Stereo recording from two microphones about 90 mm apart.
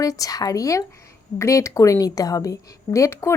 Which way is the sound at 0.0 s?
40° left (ahead or behind).